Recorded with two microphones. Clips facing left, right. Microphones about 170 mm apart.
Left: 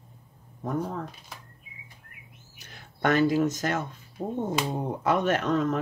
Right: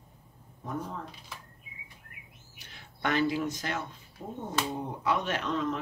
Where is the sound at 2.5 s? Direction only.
45° left (ahead or behind).